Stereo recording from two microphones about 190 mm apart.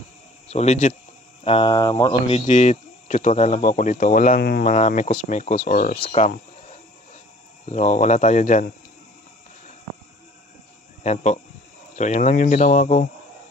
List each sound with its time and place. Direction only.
0.5 s speech: 35° left (ahead or behind); by 4.7 s 55° left (ahead or behind)
4.7 s speech: 40° left (ahead or behind)
5.9 s speech: 25° left (ahead or behind)
7.7 s speech: 40° left (ahead or behind)
11.0 s speech: 35° left (ahead or behind)